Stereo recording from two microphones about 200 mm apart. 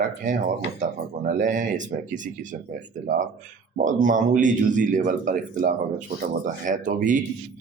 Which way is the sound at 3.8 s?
40° right (ahead or behind).